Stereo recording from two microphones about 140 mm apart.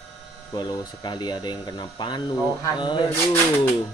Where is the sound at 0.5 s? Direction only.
30° left (ahead or behind).